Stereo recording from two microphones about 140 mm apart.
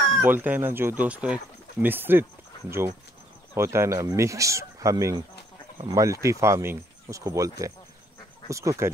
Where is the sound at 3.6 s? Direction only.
20° right (ahead or behind).